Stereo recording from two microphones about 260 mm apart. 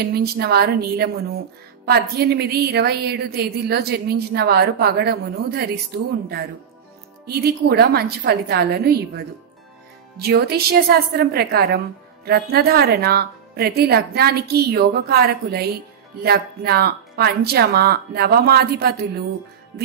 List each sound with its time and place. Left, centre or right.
0.0 s a woman's voice: right